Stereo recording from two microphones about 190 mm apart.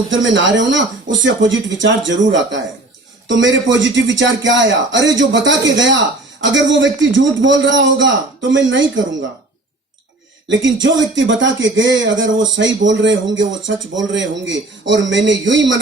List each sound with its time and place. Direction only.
0.1 s speech: 75° right (ahead or behind)
10.5 s speech: 75° right (ahead or behind)